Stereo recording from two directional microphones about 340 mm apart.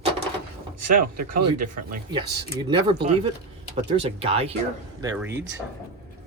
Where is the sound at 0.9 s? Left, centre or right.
Right.